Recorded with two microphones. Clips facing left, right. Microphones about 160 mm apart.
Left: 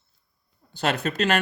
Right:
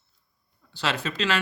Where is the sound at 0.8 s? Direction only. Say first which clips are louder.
Left 4 dB; 50° left (ahead or behind).